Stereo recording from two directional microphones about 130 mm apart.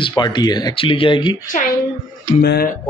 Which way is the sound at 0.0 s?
35° left (ahead or behind).